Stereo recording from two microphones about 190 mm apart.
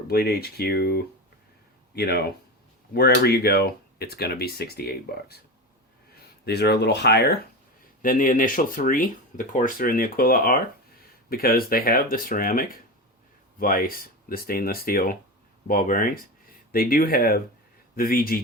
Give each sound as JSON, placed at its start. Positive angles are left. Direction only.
{"t": 0.1, "sound": "speech", "side_deg": 55}
{"t": 6.4, "sound": "speech", "side_deg": 60}
{"t": 8.0, "sound": "speech", "side_deg": 45}